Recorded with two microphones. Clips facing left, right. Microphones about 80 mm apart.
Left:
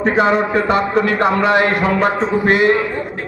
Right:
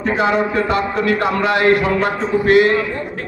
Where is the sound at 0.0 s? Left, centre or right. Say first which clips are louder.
Left 2 dB; left.